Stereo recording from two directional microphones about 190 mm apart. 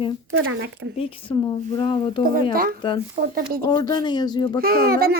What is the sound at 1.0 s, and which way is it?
A woman's voice, 30° left (ahead or behind).